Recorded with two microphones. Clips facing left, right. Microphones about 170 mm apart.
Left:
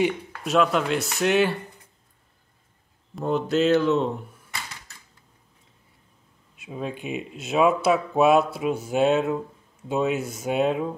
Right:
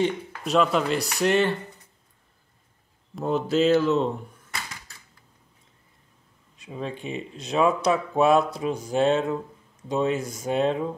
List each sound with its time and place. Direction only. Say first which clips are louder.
0.4 s speech: even; centre (ahead or behind)
3.2 s speech: even; centre (ahead or behind)
6.5 s speech: left 1 dB; 5° left (ahead or behind)